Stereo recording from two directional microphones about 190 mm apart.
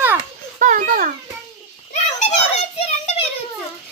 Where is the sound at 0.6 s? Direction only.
40° right (ahead or behind).